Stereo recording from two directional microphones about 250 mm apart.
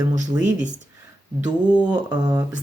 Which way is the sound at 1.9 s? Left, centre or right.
Centre.